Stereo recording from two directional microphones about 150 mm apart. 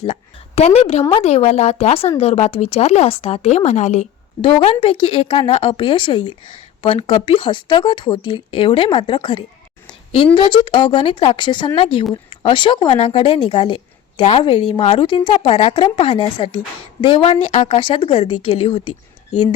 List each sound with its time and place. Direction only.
0.0 s a woman's voice: 45° left (ahead or behind)
4.4 s speech: 40° left (ahead or behind)